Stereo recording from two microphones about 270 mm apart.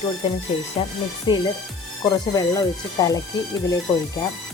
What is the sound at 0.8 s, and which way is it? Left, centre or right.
Speech, left.